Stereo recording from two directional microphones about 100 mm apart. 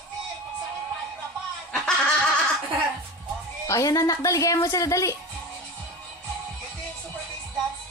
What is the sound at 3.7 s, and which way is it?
Speech, 35° left (ahead or behind).